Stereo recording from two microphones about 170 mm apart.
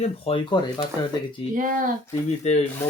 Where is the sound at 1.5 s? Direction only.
55° right (ahead or behind).